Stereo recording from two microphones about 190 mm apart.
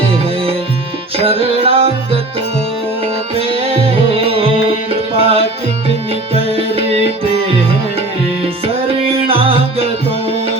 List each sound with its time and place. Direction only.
1.2 s music: 30° right (ahead or behind)
3.6 s music: 30° right (ahead or behind)
8.6 s music: 30° right (ahead or behind)